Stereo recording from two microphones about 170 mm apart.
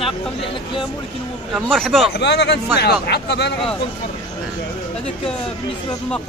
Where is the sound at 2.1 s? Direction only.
80° left.